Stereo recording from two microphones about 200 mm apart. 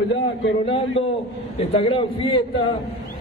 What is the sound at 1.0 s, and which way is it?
A man's voice, 30° left (ahead or behind).